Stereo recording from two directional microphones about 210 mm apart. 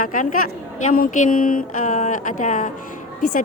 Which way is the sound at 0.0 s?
40° left (ahead or behind).